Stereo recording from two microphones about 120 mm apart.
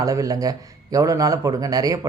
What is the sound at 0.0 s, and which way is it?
A man's voice, 30° right (ahead or behind).